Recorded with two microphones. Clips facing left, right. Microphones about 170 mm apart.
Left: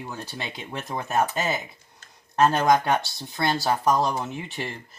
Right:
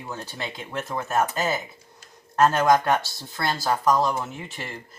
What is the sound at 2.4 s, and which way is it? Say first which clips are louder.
Speech: right 1 dB; 15° left (ahead or behind).